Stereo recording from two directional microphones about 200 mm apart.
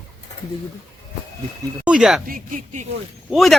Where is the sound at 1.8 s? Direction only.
5° right (ahead or behind).